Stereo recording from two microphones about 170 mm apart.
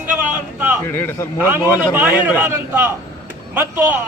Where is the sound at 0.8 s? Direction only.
15° left (ahead or behind).